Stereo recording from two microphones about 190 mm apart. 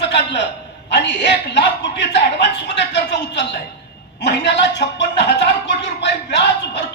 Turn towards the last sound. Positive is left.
turn(degrees=65)  # may be behind; listen again after turning